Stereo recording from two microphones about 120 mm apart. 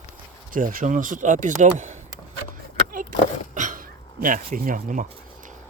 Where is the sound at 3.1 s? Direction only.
90° right.